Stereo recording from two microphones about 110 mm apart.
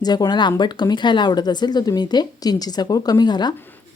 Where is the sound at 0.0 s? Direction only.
40° left (ahead or behind).